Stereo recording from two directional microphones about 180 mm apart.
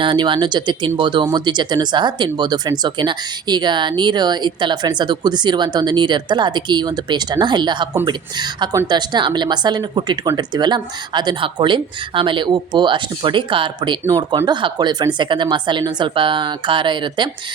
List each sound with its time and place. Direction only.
0.0 s speech: 25° right (ahead or behind)